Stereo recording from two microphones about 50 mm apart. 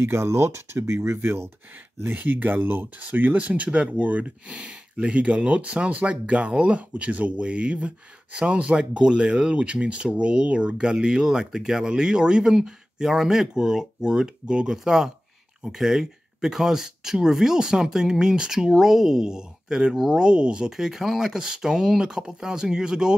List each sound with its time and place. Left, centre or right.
0.0 s speech: right
2.1 s speech: right; by 20.2 s centre
20.2 s speech: centre
20.7 s speech: centre